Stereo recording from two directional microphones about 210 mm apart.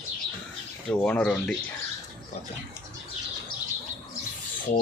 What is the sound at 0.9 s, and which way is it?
Speech, 5° left (ahead or behind).